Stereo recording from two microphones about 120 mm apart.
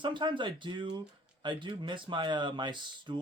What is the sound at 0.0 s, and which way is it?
Speech, 40° right (ahead or behind).